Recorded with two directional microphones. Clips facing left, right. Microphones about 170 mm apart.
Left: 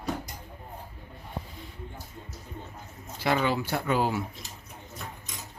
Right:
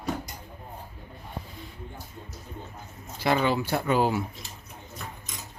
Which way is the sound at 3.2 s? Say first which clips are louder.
Right 2 dB; 25° right (ahead or behind).